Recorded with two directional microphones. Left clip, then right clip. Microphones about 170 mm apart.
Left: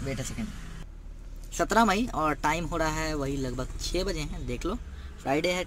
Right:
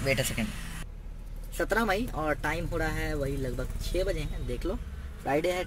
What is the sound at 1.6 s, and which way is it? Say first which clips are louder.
Speech: left 4 dB; 55° left (ahead or behind).